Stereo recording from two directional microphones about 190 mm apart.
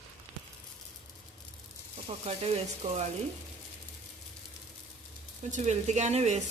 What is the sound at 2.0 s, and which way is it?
Speech, 30° right (ahead or behind).